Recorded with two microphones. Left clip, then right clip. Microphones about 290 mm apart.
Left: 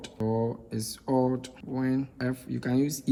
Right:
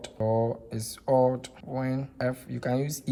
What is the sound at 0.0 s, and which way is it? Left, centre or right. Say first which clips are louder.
Speech: right 3 dB; right.